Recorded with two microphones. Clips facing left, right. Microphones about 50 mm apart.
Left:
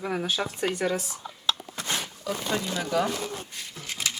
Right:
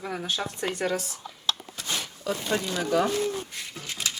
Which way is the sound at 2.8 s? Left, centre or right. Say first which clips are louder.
Right 2 dB; centre.